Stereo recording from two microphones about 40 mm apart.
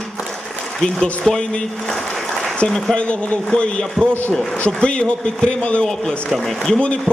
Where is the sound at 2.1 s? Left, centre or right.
Centre.